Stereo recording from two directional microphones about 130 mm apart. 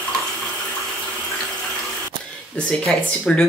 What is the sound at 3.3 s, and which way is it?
Speech, 5° left (ahead or behind).